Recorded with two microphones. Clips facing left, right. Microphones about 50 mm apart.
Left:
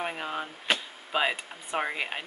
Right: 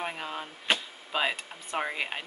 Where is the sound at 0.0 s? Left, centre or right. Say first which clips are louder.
Left 2 dB; centre.